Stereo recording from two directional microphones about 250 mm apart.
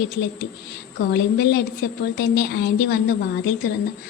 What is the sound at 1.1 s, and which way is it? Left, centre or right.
A woman's voice, left.